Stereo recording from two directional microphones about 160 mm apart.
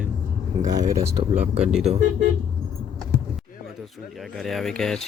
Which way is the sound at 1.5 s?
5° right (ahead or behind).